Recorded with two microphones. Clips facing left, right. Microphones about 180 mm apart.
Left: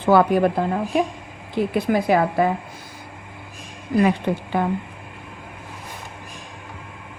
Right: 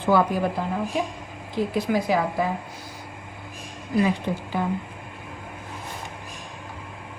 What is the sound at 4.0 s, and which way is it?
Speech, 60° left (ahead or behind).